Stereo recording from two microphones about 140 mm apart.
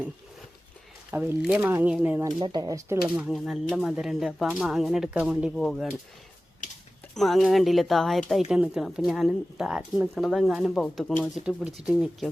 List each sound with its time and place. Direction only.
1.1 s speech: 15° right (ahead or behind)
2.4 s speech: 30° right (ahead or behind)
3.2 s speech: 5° right (ahead or behind)
7.1 s speech: centre (ahead or behind)